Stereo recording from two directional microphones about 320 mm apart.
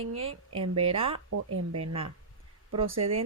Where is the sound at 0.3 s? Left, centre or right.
Right.